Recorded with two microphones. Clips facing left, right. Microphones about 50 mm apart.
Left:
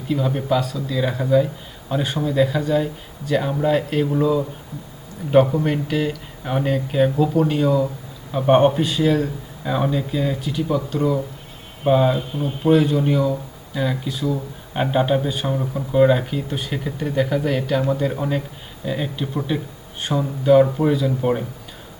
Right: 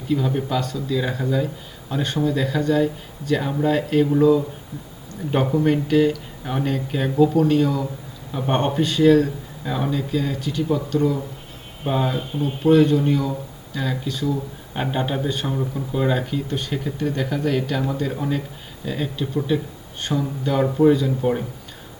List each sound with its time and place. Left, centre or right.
0.1 s speech: centre
21.2 s speech: centre